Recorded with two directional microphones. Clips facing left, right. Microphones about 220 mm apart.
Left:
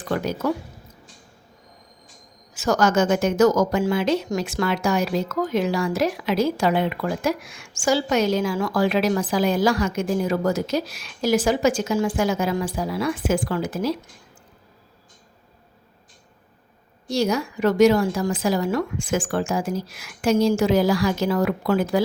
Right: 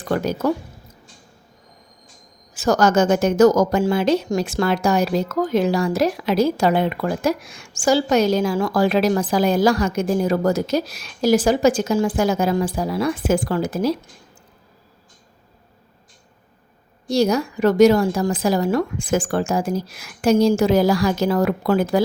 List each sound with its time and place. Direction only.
0.1 s speech: 40° right (ahead or behind)
2.6 s speech: 35° right (ahead or behind)
17.1 s speech: 40° right (ahead or behind)